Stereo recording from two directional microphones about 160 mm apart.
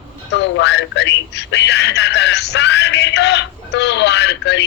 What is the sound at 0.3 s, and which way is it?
A man's voice, 90° left.